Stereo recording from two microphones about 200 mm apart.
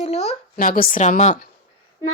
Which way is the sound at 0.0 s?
35° left (ahead or behind).